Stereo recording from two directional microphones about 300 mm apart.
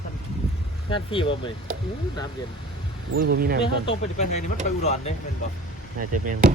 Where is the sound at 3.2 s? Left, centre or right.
Right.